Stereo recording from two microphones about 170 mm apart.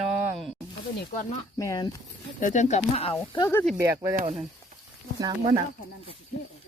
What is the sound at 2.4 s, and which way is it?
Speech, 45° left (ahead or behind).